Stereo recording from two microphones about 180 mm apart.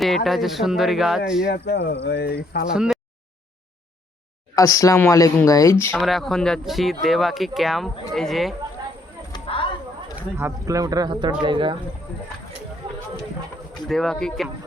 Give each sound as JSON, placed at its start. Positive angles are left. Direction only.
{"t": 0.3, "sound": "speech", "side_deg": 0}
{"t": 1.5, "sound": "speech", "side_deg": 65}
{"t": 2.7, "sound": "speech", "side_deg": -5}
{"t": 4.5, "sound": "speech", "side_deg": 20}
{"t": 6.0, "sound": "speech", "side_deg": 0}
{"t": 9.3, "sound": "a sound", "side_deg": 30}
{"t": 10.3, "sound": "speech", "side_deg": -15}
{"t": 13.8, "sound": "speech", "side_deg": 0}